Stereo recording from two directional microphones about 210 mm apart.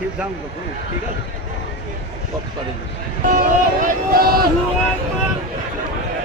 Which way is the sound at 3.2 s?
40° right (ahead or behind).